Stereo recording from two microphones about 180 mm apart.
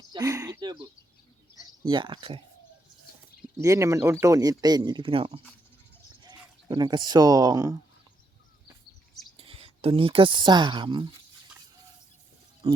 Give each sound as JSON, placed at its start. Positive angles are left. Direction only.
{"t": 0.1, "sound": "a sound", "side_deg": -20}
{"t": 1.9, "sound": "speech", "side_deg": -25}
{"t": 3.6, "sound": "speech", "side_deg": -15}
{"t": 9.4, "sound": "speech", "side_deg": -30}
{"t": 12.6, "sound": "speech", "side_deg": -30}